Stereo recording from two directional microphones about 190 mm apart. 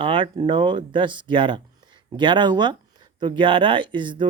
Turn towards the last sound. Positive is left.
turn(degrees=-25)  # may be behind; listen again after turning